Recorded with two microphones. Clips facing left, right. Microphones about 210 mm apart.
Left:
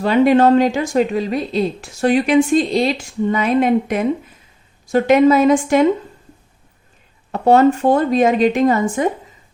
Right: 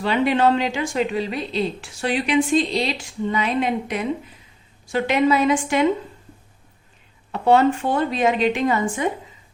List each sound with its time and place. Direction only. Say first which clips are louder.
0.0 s a woman's voice: left 6 dB; 45° left (ahead or behind)
7.3 s a woman's voice: left 4 dB; 45° left (ahead or behind)